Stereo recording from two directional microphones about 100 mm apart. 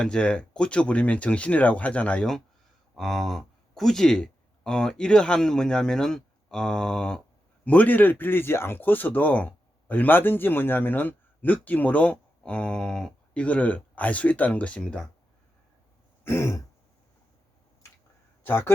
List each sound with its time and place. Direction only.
0.0 s speech: 10° left (ahead or behind)
16.2 s throat clearing: 25° left (ahead or behind)
18.4 s speech: 25° left (ahead or behind)